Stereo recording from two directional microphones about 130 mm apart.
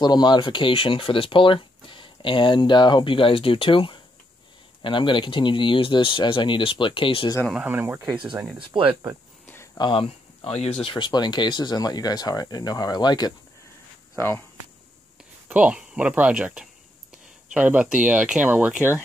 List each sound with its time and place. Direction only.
0.0 s speech: 35° left (ahead or behind)
7.5 s speech: 15° right (ahead or behind)
8.7 s speech: 40° right (ahead or behind)
9.8 s speech: 40° left (ahead or behind)
14.1 s speech: 20° left (ahead or behind)
15.4 s speech: 10° right (ahead or behind)